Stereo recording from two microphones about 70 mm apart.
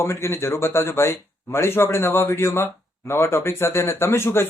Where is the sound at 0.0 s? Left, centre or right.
Left.